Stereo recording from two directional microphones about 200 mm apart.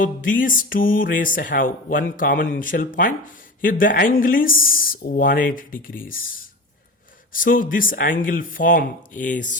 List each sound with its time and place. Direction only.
0.0 s music: 40° left (ahead or behind)
7.3 s music: 45° left (ahead or behind)
9.2 s a sound: 40° left (ahead or behind)